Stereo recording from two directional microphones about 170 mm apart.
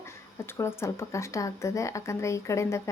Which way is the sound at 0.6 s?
15° left (ahead or behind).